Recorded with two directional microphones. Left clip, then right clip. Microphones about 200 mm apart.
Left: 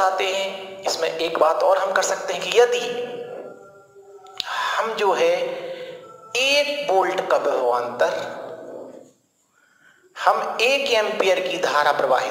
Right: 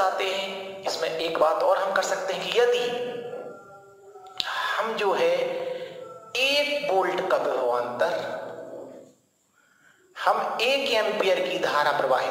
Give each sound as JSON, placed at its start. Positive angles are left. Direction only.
{"t": 0.0, "sound": "a man's voice", "side_deg": 40}
{"t": 4.4, "sound": "speech", "side_deg": 40}
{"t": 10.1, "sound": "a man's voice", "side_deg": 40}